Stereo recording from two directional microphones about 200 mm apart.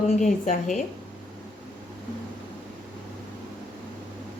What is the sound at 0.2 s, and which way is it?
Speech, 35° left (ahead or behind).